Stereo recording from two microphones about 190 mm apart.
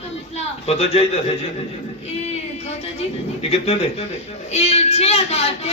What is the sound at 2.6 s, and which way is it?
Speech, 35° left (ahead or behind).